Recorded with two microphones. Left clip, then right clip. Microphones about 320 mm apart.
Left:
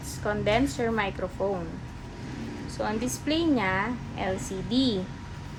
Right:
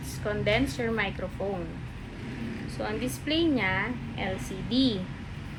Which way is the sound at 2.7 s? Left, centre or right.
Left.